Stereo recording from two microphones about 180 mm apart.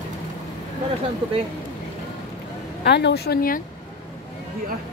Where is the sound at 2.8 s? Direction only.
70° left (ahead or behind).